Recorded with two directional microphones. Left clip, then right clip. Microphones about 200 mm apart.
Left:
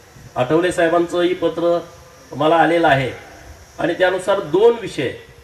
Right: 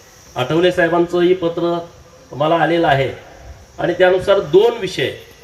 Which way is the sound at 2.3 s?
55° left (ahead or behind).